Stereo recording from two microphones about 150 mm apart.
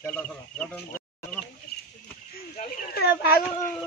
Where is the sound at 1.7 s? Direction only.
90° left.